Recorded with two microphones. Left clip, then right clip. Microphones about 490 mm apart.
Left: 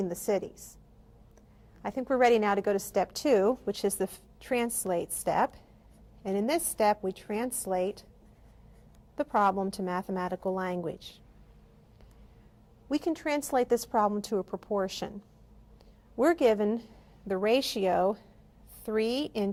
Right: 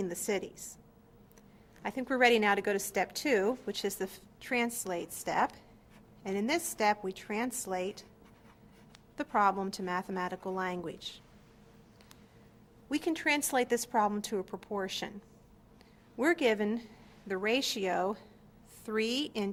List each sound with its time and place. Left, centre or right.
0.0 s a woman's voice: left
1.8 s a woman's voice: left
9.1 s a woman's voice: left
12.9 s a woman's voice: left
16.1 s a woman's voice: left